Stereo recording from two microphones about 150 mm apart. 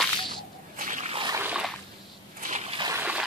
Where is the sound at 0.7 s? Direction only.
60° right (ahead or behind).